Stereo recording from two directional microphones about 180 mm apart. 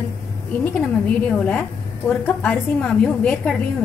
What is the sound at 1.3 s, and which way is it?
A woman's voice, 5° left (ahead or behind).